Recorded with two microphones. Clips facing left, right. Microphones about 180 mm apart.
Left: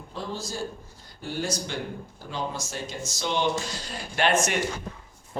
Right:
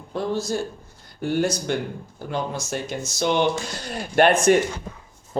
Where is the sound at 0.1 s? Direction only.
60° right (ahead or behind).